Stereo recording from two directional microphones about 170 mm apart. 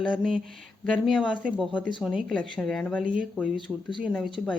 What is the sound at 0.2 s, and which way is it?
A woman's voice, 5° left (ahead or behind).